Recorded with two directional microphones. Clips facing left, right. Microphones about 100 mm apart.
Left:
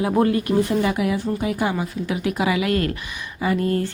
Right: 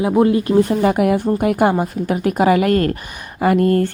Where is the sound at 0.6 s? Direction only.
50° right (ahead or behind).